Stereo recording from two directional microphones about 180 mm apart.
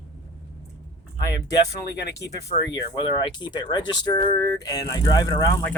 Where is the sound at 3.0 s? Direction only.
25° left (ahead or behind).